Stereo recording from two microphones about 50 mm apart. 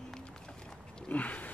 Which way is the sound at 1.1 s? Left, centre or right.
Left.